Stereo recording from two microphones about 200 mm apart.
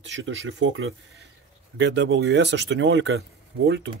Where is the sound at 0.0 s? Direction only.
65° right (ahead or behind).